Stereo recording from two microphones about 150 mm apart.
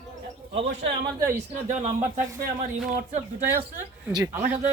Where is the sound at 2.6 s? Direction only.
60° right (ahead or behind).